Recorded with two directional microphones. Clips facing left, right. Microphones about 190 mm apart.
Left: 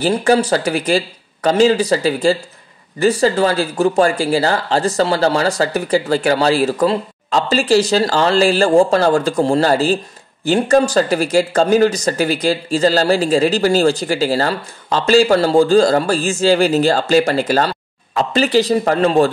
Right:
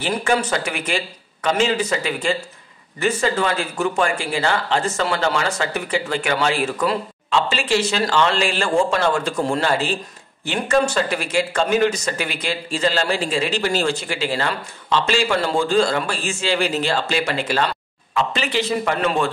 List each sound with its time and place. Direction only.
0.0 s speech: 35° left (ahead or behind)